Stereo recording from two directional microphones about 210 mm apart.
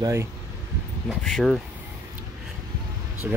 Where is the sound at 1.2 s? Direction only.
Centre (ahead or behind).